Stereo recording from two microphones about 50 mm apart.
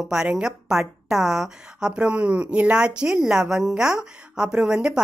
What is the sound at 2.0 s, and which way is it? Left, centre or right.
Speech, right.